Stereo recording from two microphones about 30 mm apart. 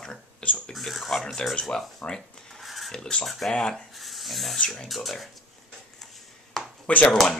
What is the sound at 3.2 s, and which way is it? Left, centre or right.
Speech, centre.